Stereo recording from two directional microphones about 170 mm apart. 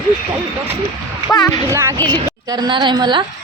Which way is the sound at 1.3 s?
20° left (ahead or behind).